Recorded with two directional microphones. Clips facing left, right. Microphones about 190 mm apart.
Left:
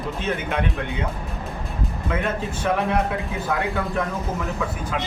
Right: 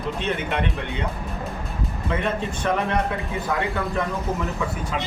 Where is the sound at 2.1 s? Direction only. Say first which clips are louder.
Right 1 dB; 5° left (ahead or behind).